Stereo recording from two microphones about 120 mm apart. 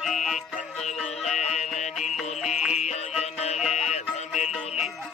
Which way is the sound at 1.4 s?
75° left (ahead or behind).